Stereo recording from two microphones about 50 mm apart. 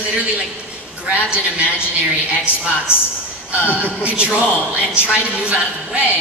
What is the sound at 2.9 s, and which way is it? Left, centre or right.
Speech, left.